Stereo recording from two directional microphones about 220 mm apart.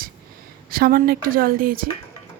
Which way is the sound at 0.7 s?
40° right (ahead or behind).